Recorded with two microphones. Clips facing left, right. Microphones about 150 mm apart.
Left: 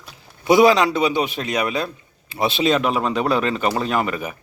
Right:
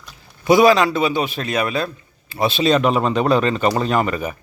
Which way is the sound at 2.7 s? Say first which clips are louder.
Right 5 dB; 5° left (ahead or behind).